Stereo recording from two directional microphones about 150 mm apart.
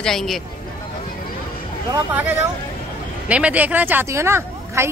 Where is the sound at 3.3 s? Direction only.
10° right (ahead or behind).